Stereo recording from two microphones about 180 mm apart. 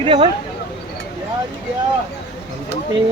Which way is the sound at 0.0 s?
30° right (ahead or behind).